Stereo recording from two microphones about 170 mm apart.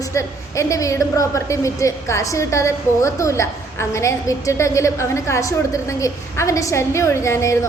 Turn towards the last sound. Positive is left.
turn(degrees=15)  # may be behind; listen again after turning